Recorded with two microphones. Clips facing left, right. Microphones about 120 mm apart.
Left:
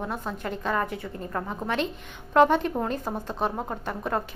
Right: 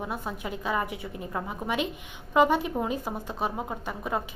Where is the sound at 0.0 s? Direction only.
5° right (ahead or behind).